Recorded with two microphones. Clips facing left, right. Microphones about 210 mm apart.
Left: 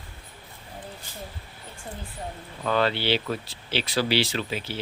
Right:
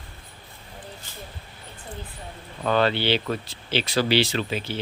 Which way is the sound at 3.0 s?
5° left (ahead or behind).